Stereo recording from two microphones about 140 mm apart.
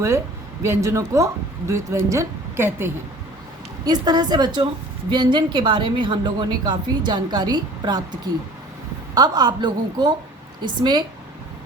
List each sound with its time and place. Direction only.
0.6 s a woman's voice: 20° right (ahead or behind)
3.8 s a woman's voice: 30° right (ahead or behind)
9.1 s a woman's voice: 30° right (ahead or behind)